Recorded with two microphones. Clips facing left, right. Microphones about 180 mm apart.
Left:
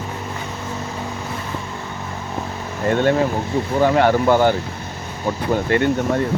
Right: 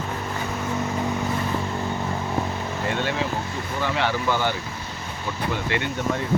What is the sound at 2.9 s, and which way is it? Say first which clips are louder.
Speech: left 11 dB; 45° left (ahead or behind).